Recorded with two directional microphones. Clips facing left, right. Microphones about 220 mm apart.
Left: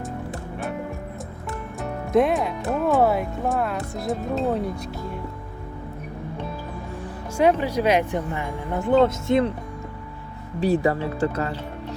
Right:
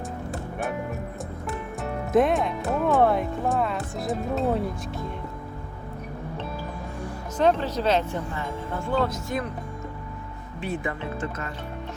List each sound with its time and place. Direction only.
1.5 s speech: centre (ahead or behind)
7.3 s speech: 10° left (ahead or behind)
10.6 s speech: 40° left (ahead or behind)